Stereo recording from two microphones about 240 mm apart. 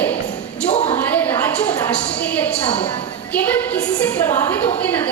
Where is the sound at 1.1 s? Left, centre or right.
Centre.